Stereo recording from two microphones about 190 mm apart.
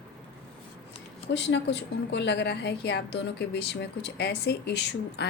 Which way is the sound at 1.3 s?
65° left (ahead or behind).